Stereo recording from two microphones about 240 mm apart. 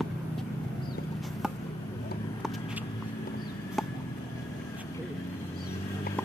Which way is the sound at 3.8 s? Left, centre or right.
Centre.